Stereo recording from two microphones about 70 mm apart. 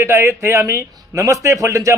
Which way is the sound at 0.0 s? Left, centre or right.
Right.